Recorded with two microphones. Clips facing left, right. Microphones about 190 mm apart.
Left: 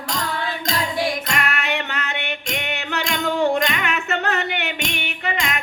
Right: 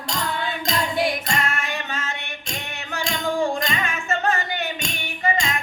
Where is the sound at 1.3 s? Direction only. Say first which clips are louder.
Left 2 dB; 70° left (ahead or behind).